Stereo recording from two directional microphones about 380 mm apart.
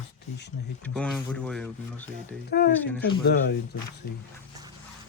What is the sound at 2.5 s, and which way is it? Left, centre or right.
Speech, left.